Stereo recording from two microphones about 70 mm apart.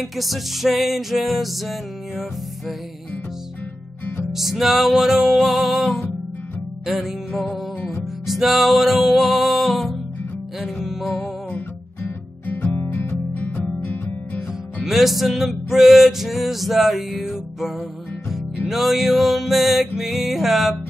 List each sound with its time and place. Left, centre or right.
0.0 s music: centre
4.3 s music: centre
11.5 s music: left
14.8 s music: centre
18.7 s music: centre